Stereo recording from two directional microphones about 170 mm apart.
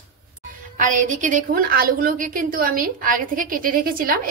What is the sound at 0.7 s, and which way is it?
A woman's voice, 50° right (ahead or behind).